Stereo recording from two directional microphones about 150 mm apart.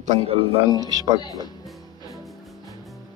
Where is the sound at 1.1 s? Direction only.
25° left (ahead or behind).